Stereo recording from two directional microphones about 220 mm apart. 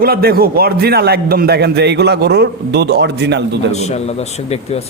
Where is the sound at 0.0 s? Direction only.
45° right (ahead or behind).